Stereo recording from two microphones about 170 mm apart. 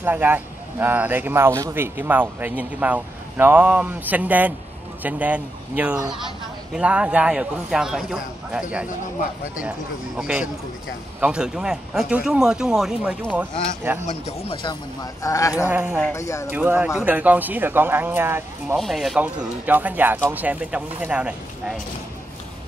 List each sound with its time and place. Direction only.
0.0 s speech: 10° right (ahead or behind)
14.5 s speech: 25° left (ahead or behind)
15.7 s speech: 10° right (ahead or behind)
16.1 s speech: 15° left (ahead or behind)
16.5 s speech: 10° right (ahead or behind)
18.8 s speech: centre (ahead or behind)